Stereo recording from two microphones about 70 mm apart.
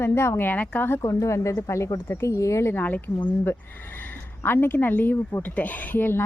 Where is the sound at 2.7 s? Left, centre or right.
Left.